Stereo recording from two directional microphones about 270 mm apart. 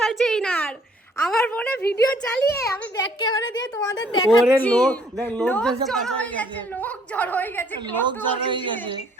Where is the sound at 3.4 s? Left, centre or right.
Left.